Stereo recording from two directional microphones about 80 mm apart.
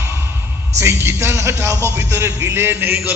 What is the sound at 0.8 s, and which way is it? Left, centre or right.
A man's voice, right.